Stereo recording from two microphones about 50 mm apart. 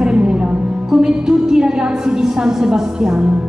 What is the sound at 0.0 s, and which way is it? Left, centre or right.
Music, centre.